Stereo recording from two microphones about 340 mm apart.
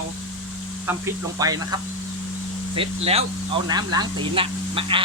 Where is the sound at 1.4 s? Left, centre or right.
Centre.